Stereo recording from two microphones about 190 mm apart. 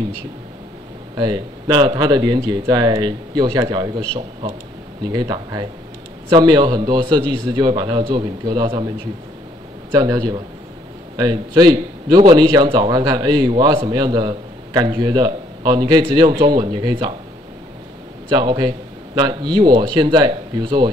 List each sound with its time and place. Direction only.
1.1 s a man's voice: 25° right (ahead or behind)
5.0 s a man's voice: 20° right (ahead or behind)
9.9 s a man's voice: 20° right (ahead or behind)
18.3 s a man's voice: 25° right (ahead or behind)